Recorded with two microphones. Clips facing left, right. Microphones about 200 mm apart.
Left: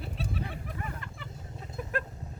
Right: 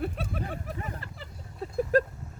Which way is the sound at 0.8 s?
35° right (ahead or behind).